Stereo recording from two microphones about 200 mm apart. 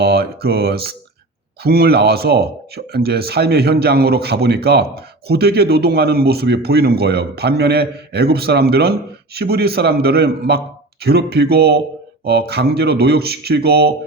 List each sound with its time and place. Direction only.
0.0 s speech: 50° right (ahead or behind)